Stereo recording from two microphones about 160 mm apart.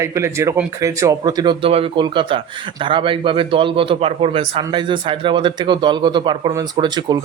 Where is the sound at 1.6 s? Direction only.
35° right (ahead or behind).